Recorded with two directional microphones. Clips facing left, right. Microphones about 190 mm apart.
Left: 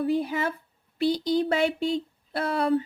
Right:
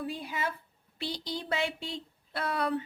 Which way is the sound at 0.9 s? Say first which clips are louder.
Left 13 dB; 45° left (ahead or behind).